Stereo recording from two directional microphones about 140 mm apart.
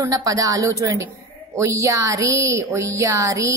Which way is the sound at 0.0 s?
25° right (ahead or behind).